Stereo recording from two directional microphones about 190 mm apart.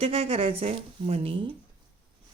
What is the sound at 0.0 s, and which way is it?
A woman's voice, 30° right (ahead or behind).